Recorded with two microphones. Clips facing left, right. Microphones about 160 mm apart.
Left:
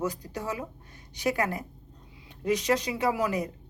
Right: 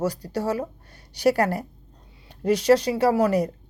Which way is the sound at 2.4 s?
70° right (ahead or behind).